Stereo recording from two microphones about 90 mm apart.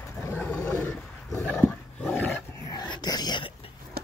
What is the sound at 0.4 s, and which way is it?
Roaring cats, 15° left (ahead or behind).